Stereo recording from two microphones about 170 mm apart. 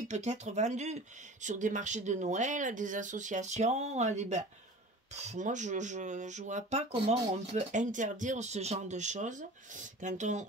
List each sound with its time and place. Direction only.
0.1 s speech: 40° right (ahead or behind)